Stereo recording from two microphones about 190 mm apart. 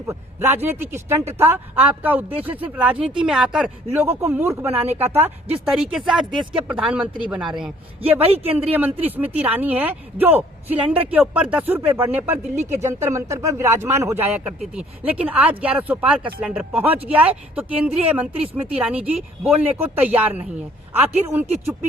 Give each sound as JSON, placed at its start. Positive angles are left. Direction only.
{"t": 0.1, "sound": "speech", "side_deg": -10}
{"t": 8.0, "sound": "a man's voice", "side_deg": -30}
{"t": 8.7, "sound": "speech", "side_deg": -10}